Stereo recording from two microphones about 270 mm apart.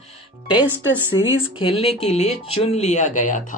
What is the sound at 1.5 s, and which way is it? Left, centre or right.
Speech, centre.